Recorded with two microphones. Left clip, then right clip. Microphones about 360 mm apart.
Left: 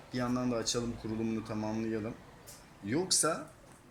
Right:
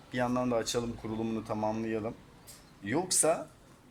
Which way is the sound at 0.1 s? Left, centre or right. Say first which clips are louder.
Right 4 dB; right.